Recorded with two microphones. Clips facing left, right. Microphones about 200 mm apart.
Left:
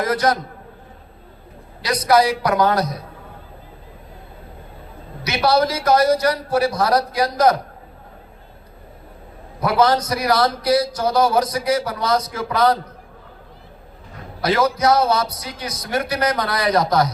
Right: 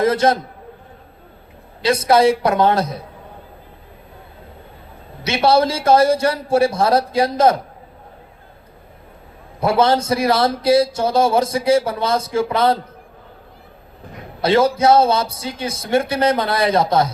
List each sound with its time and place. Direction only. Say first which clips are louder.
0.0 s a man's voice: right 4 dB; 25° right (ahead or behind)
1.8 s a man's voice: right 3 dB; 25° right (ahead or behind)
5.2 s a man's voice: right 2 dB; 25° right (ahead or behind)
9.6 s a man's voice: right 1 dB; 25° right (ahead or behind)
14.4 s a man's voice: right 3 dB; 25° right (ahead or behind)